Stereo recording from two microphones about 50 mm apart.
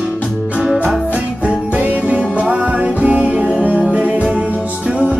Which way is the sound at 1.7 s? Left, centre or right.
Right.